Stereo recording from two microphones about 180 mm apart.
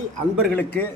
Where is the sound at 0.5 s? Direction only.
10° left (ahead or behind).